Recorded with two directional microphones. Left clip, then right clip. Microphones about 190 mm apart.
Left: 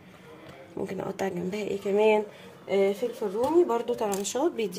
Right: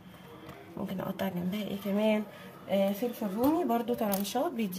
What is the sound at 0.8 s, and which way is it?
Speech, 30° left (ahead or behind).